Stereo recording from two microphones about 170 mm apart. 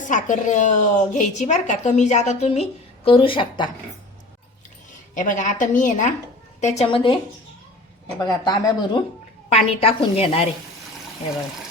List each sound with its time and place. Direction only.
0.0 s a woman's voice: 50° left (ahead or behind); by 3.7 s 30° left (ahead or behind)
5.1 s a woman's voice: 50° left (ahead or behind)
6.8 s a woman's voice: 30° left (ahead or behind)
8.2 s speech: 25° left (ahead or behind)
9.5 s a woman's voice: 35° left (ahead or behind)